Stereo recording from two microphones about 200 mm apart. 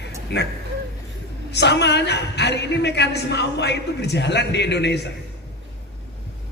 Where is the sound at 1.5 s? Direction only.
60° left (ahead or behind).